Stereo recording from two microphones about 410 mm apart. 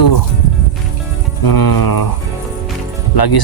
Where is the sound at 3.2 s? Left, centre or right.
Left.